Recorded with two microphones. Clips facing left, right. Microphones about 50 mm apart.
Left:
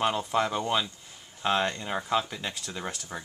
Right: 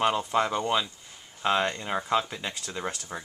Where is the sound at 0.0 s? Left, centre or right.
Centre.